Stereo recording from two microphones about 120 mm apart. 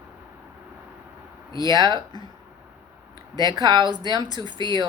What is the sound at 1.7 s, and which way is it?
Speech, 35° right (ahead or behind).